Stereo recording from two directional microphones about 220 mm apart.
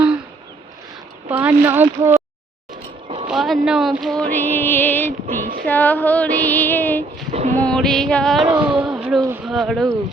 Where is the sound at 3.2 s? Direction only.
Centre (ahead or behind).